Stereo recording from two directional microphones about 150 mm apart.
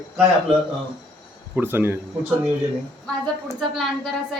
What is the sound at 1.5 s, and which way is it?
Speech, 15° right (ahead or behind).